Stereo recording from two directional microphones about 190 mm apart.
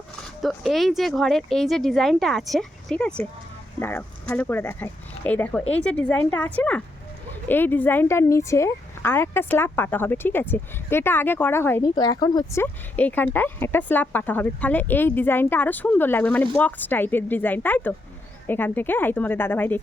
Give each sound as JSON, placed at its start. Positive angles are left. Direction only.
{"t": 0.4, "sound": "speech", "side_deg": 0}